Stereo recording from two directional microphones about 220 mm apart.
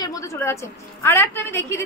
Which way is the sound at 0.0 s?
15° left (ahead or behind).